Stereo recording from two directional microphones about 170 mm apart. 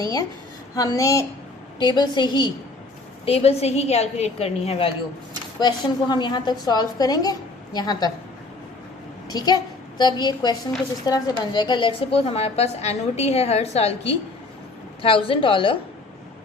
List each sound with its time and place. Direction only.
0.0 s a woman's voice: 20° left (ahead or behind)
3.2 s a woman's voice: 35° left (ahead or behind)
5.5 s a woman's voice: 25° left (ahead or behind)
9.3 s a woman's voice: 20° left (ahead or behind)